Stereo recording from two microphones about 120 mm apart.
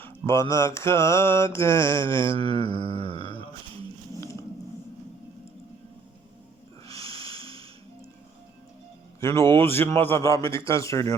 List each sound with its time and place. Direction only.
0.0 s music: 20° left (ahead or behind)
2.3 s mantra: 50° right (ahead or behind)
3.0 s mantra: 45° left (ahead or behind)
7.1 s snort: 50° right (ahead or behind)
9.2 s music: 25° left (ahead or behind)